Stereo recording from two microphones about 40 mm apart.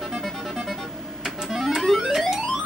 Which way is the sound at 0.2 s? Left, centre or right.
Centre.